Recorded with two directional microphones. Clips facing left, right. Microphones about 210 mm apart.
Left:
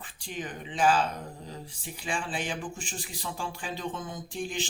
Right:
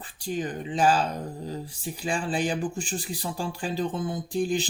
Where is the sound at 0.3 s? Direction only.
40° right (ahead or behind).